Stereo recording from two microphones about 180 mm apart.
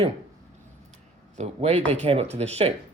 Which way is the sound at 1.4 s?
40° right (ahead or behind).